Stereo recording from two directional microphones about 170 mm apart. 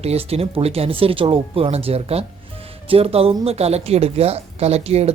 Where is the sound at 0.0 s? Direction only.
35° right (ahead or behind).